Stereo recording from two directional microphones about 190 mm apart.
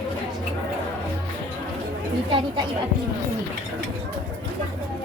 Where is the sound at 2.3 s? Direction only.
25° right (ahead or behind).